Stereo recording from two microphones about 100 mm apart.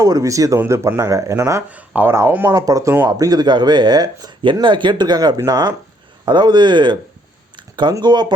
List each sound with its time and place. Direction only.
0.0 s speech: 35° right (ahead or behind)
1.7 s speech: 15° right (ahead or behind); by 6.9 s 50° right (ahead or behind)
8.0 s speech: 45° right (ahead or behind)